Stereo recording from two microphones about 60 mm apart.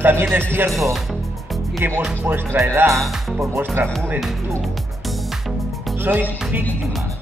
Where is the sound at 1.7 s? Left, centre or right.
Right.